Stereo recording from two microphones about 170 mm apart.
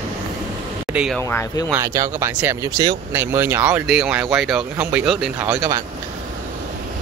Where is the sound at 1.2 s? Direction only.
15° left (ahead or behind).